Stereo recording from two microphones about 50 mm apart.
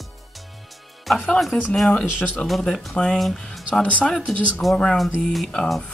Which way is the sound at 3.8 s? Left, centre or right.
Left.